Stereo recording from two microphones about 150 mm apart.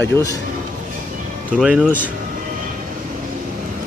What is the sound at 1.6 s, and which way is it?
Speech, 5° right (ahead or behind).